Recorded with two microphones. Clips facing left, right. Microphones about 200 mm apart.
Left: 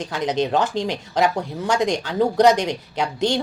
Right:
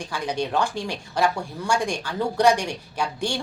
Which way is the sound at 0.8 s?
20° left (ahead or behind).